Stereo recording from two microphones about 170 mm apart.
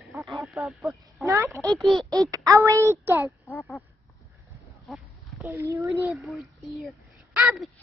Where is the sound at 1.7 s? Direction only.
Centre (ahead or behind).